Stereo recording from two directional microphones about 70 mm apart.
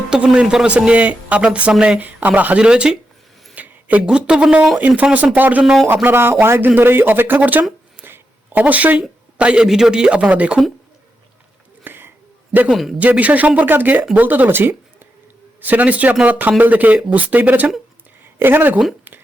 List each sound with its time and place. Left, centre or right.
0.3 s speech: centre
4.8 s speech: right
5.6 s speech: centre
5.9 s speech: right
8.0 s a sound: right
9.0 s speech: centre
11.8 s a sound: right
12.7 s speech: centre
13.0 s speech: right